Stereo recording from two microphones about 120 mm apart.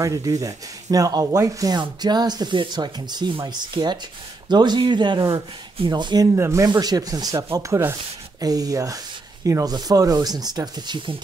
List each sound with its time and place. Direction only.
0.0 s speech: 30° right (ahead or behind)
6.3 s speech: 25° right (ahead or behind); by 11.1 s 40° right (ahead or behind)